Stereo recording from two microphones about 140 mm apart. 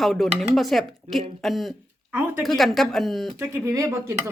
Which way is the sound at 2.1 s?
15° right (ahead or behind).